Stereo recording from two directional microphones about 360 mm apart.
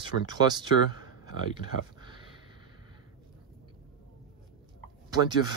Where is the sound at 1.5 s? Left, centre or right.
Centre.